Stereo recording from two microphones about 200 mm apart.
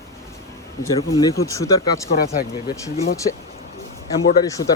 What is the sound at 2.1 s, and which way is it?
Speech, 50° left (ahead or behind).